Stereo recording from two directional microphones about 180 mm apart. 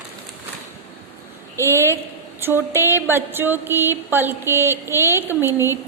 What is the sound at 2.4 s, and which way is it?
Speech, 10° right (ahead or behind).